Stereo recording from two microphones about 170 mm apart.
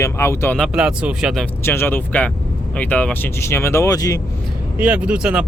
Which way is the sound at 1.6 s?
15° left (ahead or behind).